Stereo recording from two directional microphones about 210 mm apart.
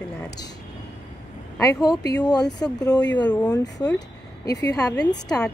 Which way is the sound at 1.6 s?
15° left (ahead or behind).